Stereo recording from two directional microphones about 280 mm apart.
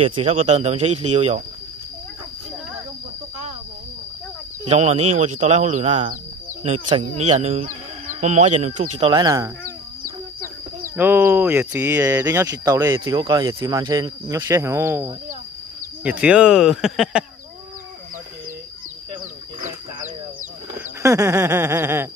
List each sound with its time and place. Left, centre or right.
0.0 s speech: right
4.6 s speech: right
11.0 s speech: centre
21.0 s speech: centre